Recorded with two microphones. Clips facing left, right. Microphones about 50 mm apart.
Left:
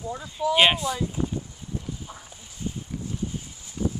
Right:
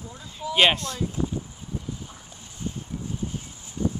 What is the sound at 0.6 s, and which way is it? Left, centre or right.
Speech, centre.